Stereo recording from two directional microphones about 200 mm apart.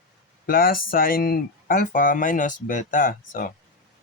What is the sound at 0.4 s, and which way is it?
Speech, 45° left (ahead or behind).